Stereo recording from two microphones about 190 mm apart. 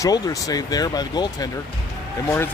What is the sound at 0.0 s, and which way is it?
Speech, 20° left (ahead or behind).